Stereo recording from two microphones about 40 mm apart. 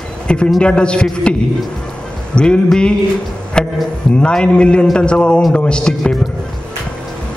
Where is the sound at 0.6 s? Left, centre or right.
Left.